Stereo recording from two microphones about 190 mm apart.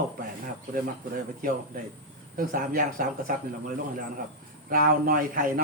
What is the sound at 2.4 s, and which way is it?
Speech, 45° right (ahead or behind).